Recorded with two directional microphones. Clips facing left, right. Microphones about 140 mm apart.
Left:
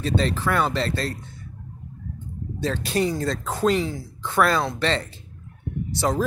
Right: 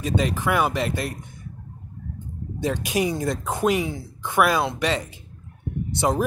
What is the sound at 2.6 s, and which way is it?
A man's voice, 15° right (ahead or behind).